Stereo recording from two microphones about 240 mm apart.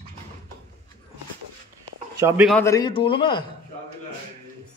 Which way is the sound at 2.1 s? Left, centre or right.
Centre.